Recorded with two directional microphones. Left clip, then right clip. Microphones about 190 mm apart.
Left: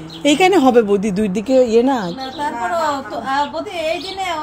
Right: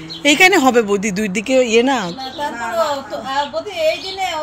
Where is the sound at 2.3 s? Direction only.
50° right (ahead or behind).